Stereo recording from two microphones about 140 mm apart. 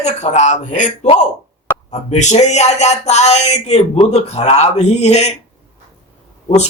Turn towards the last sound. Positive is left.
turn(degrees=50)  # may be behind; listen again after turning